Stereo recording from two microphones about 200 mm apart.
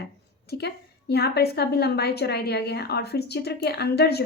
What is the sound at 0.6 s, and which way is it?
A woman's voice, 55° left (ahead or behind).